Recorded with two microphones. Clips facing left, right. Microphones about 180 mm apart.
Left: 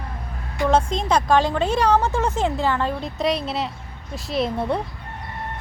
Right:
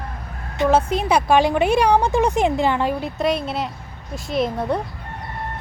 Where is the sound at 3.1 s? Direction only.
Centre (ahead or behind).